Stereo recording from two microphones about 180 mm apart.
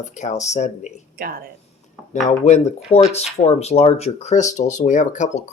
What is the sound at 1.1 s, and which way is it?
Speech, 55° right (ahead or behind).